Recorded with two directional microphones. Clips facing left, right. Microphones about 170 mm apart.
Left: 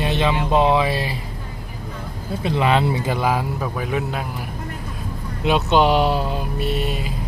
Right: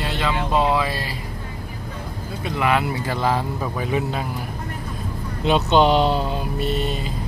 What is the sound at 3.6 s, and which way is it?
Speech, centre (ahead or behind).